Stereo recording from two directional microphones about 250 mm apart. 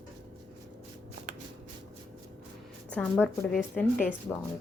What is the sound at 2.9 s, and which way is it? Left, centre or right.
Speech, centre.